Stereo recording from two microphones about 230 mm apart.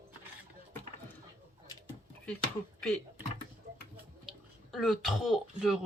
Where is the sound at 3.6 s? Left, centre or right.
Right.